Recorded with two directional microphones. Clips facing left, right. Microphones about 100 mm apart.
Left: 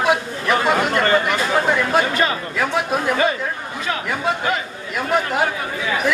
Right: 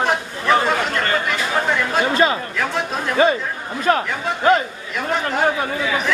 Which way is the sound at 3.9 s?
50° right (ahead or behind).